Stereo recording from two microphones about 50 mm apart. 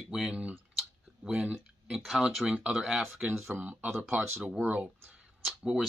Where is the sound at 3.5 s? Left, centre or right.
Right.